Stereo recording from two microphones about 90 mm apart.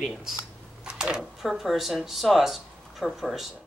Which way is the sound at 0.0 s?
5° right (ahead or behind).